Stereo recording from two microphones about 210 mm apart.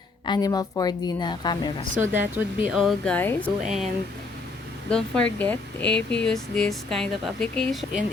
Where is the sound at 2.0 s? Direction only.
10° right (ahead or behind); by 3.4 s 10° left (ahead or behind).